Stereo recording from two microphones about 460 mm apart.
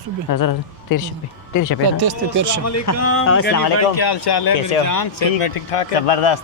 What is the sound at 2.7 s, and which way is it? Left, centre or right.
Speech, left.